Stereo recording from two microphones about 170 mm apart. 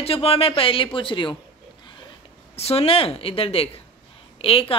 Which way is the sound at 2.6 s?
35° left (ahead or behind).